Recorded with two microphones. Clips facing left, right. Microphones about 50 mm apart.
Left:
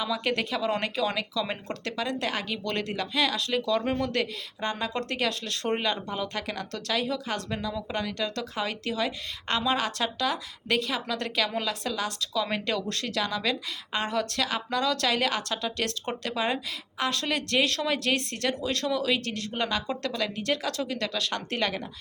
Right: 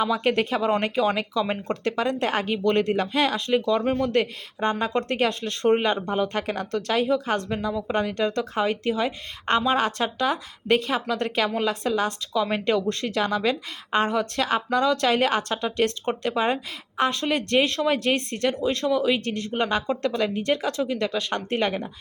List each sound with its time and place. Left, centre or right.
0.0 s a woman's voice: right
3.3 s a woman's voice: right